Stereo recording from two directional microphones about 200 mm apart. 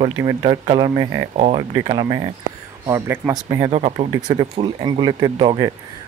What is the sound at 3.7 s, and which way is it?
Speech, 30° right (ahead or behind).